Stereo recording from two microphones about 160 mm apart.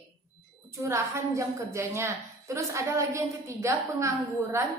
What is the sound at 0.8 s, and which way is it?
A woman's voice, 15° right (ahead or behind).